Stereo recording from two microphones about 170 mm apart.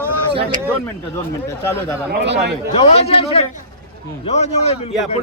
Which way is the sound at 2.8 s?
40° left (ahead or behind).